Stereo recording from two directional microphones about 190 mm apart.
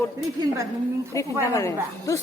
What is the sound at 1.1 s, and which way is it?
Speech, 15° left (ahead or behind).